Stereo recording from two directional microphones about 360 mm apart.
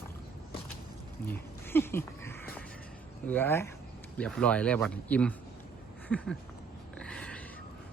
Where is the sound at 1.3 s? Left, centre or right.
Centre.